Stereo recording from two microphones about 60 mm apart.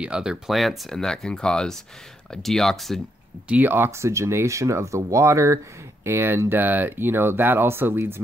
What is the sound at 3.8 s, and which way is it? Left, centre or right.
Speech, right.